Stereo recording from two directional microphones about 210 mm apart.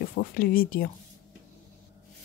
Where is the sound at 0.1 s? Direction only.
45° left (ahead or behind).